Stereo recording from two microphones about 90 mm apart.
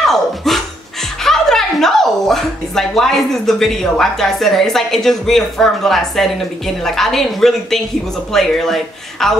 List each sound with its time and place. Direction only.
0.0 s a woman's voice: 5° left (ahead or behind)